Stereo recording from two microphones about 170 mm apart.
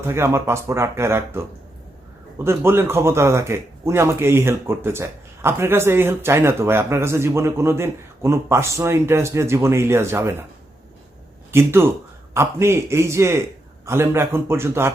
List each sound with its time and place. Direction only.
0.1 s speech: 15° right (ahead or behind)
11.5 s speech: 15° right (ahead or behind)